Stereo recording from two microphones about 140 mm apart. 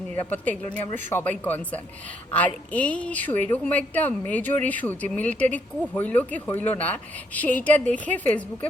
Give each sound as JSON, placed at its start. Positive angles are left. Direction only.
{"t": 0.2, "sound": "a woman's voice", "side_deg": 10}